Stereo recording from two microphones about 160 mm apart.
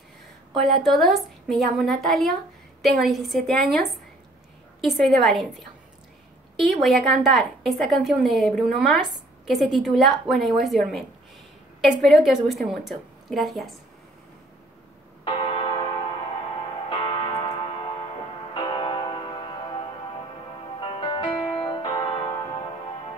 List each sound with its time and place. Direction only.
0.5 s a woman's voice: centre (ahead or behind)
6.6 s a woman's voice: centre (ahead or behind)
15.2 s church bell: 30° left (ahead or behind)
16.9 s tick-tock: 30° left (ahead or behind)
18.5 s music: 30° left (ahead or behind)